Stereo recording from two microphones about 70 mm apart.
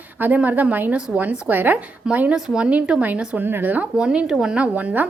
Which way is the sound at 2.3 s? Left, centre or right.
Centre.